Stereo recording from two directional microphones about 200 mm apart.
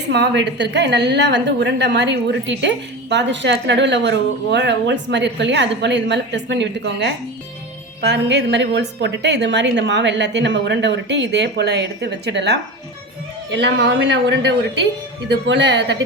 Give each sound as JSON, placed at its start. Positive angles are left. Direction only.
{"t": 0.1, "sound": "a woman's voice", "side_deg": -55}